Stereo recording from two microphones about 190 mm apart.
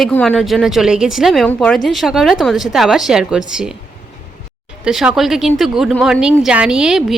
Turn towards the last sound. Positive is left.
turn(degrees=0)  # may be behind; listen again after turning